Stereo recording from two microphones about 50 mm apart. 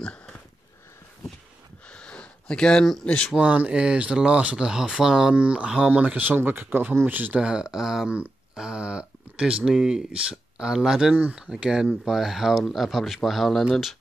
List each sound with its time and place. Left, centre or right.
1.9 s a sound: left
3.3 s speech: right
5.3 s speech: right
5.9 s speech: right
7.3 s speech: centre
8.1 s a sound: centre
9.7 s speech: centre